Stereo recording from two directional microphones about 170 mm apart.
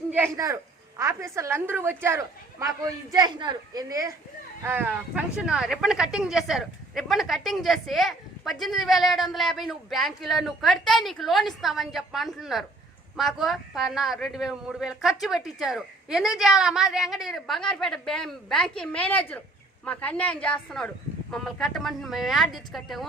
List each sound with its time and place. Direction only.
0.1 s a woman's voice: 15° right (ahead or behind)